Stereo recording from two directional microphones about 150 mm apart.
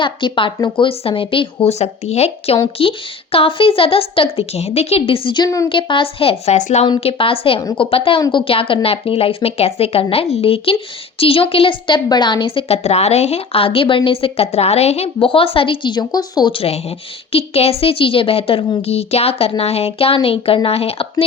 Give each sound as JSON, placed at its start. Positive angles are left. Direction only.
{"t": 0.0, "sound": "a woman's voice", "side_deg": 35}
{"t": 6.8, "sound": "a woman's voice", "side_deg": 35}